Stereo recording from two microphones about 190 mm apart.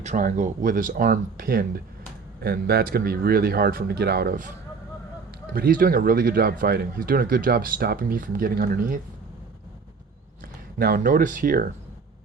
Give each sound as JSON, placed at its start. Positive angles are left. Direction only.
{"t": 0.0, "sound": "speech", "side_deg": -40}
{"t": 5.5, "sound": "speech", "side_deg": -50}
{"t": 10.8, "sound": "speech", "side_deg": -50}